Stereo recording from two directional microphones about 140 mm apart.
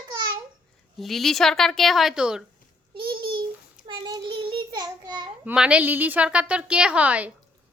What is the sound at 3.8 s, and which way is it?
Child singing, 35° right (ahead or behind).